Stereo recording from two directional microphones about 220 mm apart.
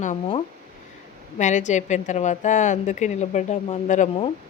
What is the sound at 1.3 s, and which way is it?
Speech, 35° left (ahead or behind).